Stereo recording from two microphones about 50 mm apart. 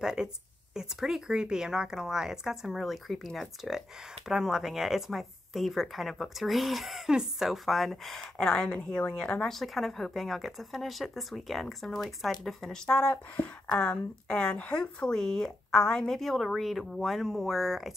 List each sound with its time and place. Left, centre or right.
0.0 s a woman's voice: centre
4.3 s a woman's voice: centre
9.5 s a woman's voice: centre
12.7 s speech: centre
13.1 s a woman's voice: left; by 17.9 s centre